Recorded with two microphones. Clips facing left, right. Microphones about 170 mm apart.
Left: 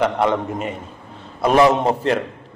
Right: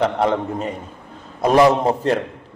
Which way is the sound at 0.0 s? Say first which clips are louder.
Even; 35° right (ahead or behind).